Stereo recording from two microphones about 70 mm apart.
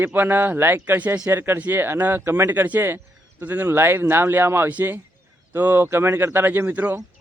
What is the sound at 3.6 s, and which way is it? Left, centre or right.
Speech, right.